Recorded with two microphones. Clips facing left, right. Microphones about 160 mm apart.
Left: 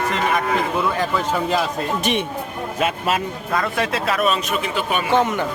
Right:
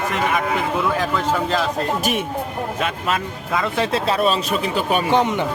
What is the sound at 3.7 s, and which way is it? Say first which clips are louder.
Speech: right 2 dB; 30° right (ahead or behind).